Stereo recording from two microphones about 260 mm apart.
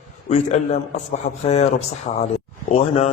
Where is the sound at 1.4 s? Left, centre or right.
Left.